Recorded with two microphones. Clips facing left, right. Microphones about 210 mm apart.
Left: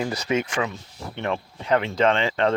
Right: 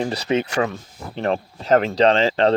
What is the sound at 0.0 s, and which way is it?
Speech, 30° right (ahead or behind).